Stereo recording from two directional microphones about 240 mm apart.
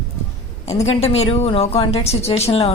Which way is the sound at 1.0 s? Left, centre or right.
Left.